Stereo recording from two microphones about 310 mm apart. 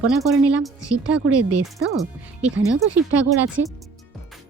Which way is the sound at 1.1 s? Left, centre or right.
Right.